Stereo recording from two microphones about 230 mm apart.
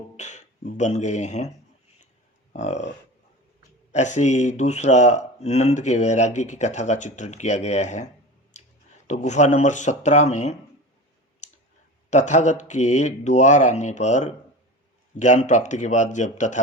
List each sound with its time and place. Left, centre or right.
0.2 s speech: left
2.5 s speech: left
3.9 s speech: left
9.0 s speech: left
12.1 s speech: left